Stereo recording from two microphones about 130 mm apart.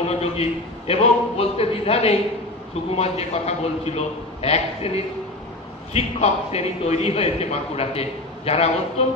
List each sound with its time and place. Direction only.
0.0 s a man's voice: 50° left (ahead or behind)